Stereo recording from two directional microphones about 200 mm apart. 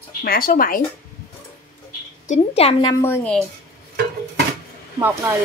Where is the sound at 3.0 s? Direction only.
10° left (ahead or behind).